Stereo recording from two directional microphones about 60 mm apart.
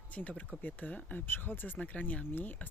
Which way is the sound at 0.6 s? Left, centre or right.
Left.